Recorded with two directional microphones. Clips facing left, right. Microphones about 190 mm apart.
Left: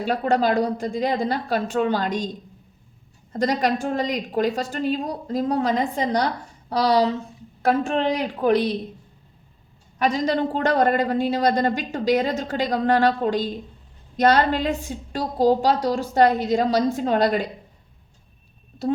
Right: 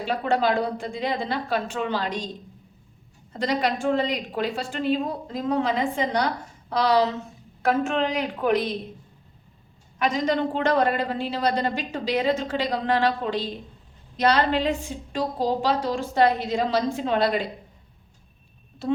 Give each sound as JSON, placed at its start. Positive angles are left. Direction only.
{"t": 0.0, "sound": "a woman's voice", "side_deg": 40}
{"t": 3.3, "sound": "a woman's voice", "side_deg": 40}
{"t": 10.0, "sound": "a woman's voice", "side_deg": 35}
{"t": 18.8, "sound": "a woman's voice", "side_deg": 40}